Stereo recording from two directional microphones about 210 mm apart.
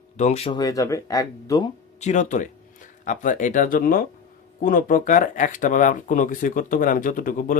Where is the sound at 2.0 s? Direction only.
35° left (ahead or behind).